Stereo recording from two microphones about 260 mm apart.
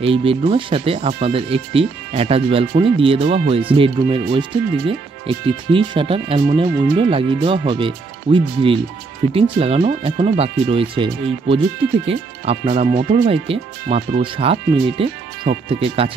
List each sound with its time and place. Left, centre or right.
0.0 s speech: right